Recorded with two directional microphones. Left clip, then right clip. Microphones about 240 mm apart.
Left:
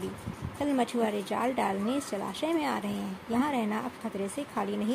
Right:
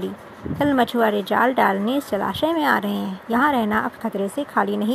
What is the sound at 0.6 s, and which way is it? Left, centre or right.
Speech, right.